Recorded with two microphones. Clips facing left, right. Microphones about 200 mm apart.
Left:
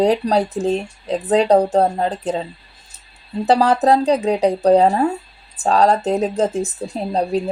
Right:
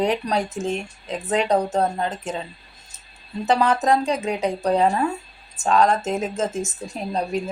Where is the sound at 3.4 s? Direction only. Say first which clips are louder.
Left 5 dB; 35° left (ahead or behind).